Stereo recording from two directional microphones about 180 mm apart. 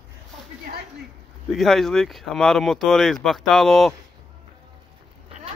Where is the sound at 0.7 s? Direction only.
55° right (ahead or behind).